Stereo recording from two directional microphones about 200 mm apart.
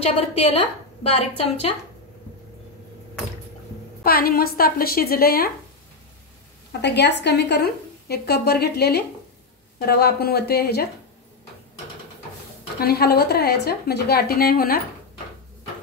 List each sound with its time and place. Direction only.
0.3 s a woman's voice: 30° left (ahead or behind)
4.0 s a woman's voice: 50° left (ahead or behind)
6.8 s a woman's voice: 60° left (ahead or behind)
12.8 s a woman's voice: 50° left (ahead or behind)